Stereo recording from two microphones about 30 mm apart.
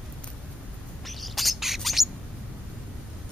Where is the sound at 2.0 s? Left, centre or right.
Centre.